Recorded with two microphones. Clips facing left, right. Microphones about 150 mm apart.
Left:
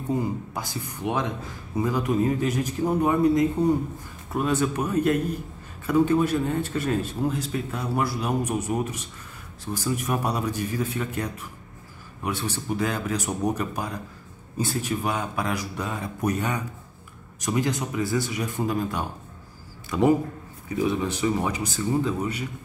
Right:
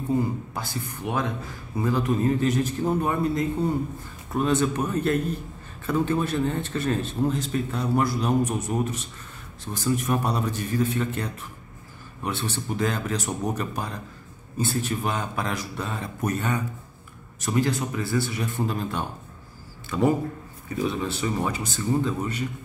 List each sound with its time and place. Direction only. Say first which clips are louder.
0.6 s speech: even; 15° left (ahead or behind)